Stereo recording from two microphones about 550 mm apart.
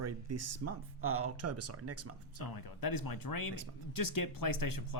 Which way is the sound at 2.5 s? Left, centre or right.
Left.